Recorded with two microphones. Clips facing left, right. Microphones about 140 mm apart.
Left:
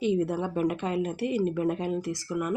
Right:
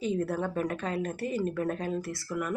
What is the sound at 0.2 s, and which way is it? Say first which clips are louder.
Speech: left 3 dB; 15° left (ahead or behind).